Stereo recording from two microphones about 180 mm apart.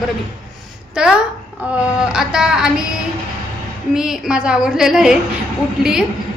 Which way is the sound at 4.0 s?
5° right (ahead or behind).